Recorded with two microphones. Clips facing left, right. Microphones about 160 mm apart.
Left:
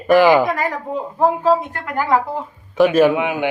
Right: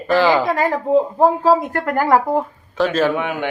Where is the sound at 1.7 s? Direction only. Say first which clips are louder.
Right 3 dB; 50° right (ahead or behind).